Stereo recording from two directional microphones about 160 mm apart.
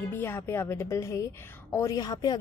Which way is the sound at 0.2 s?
15° left (ahead or behind).